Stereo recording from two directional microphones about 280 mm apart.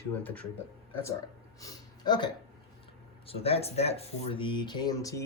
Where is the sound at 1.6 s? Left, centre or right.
Centre.